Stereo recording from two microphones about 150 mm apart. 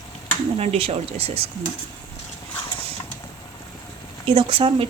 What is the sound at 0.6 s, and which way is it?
Speech, 40° right (ahead or behind).